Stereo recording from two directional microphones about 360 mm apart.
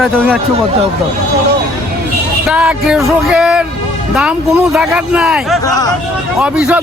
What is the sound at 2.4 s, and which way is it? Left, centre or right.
A man's voice, centre.